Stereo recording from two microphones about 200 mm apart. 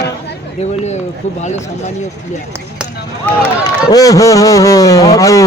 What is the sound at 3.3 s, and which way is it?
Speech, 10° left (ahead or behind).